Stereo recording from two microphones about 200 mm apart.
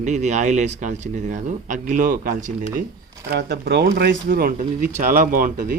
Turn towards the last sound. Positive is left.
turn(degrees=-45)  # may be behind; listen again after turning